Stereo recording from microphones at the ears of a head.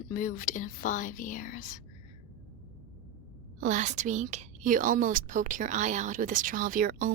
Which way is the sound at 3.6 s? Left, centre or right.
Right.